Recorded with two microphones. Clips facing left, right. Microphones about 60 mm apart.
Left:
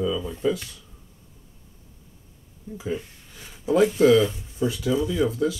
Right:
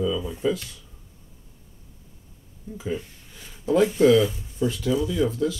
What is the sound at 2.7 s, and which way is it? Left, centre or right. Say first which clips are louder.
Speech: even; centre.